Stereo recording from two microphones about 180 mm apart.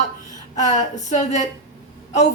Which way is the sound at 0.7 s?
40° left (ahead or behind).